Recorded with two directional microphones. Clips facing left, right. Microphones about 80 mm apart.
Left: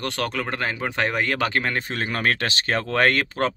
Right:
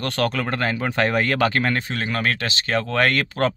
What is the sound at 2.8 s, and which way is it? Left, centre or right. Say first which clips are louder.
Speech: even; left.